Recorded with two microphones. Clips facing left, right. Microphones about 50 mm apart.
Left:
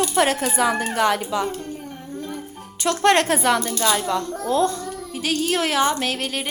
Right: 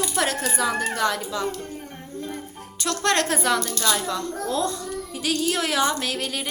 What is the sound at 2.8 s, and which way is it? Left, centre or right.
A woman's voice, centre.